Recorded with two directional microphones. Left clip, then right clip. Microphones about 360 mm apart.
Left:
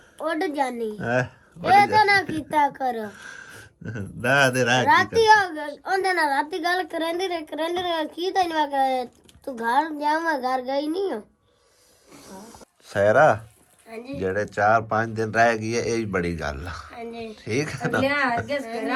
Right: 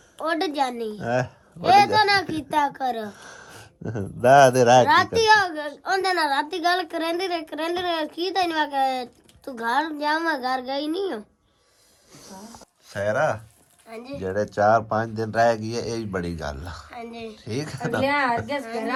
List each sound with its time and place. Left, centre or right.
0.2 s speech: centre
12.9 s speech: centre
18.0 s speech: right